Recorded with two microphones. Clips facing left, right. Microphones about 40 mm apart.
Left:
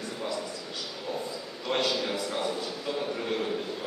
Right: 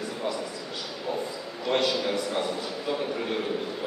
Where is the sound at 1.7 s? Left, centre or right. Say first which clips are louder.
Right 3 dB; centre.